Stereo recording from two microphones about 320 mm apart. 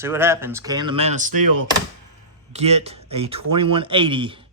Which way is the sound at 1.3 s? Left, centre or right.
Right.